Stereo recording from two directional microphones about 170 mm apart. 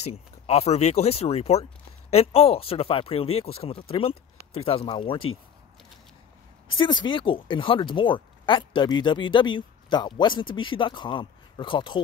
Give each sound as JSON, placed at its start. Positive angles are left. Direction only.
{"t": 0.0, "sound": "speech", "side_deg": 40}
{"t": 6.7, "sound": "speech", "side_deg": 30}